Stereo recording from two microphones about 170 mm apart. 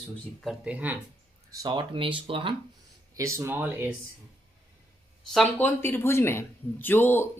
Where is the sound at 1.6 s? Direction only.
25° right (ahead or behind).